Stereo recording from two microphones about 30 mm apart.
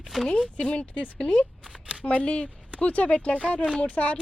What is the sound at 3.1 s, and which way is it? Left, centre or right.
Speech, left.